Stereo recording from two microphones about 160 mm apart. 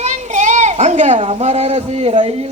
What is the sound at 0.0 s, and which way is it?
Children playing, 45° right (ahead or behind).